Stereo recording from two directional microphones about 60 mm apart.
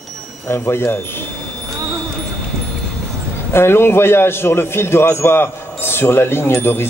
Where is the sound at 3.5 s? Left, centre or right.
Left.